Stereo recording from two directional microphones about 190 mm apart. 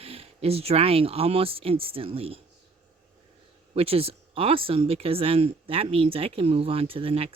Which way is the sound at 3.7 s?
30° right (ahead or behind).